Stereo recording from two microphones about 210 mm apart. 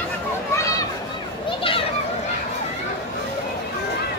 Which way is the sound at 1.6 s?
25° left (ahead or behind).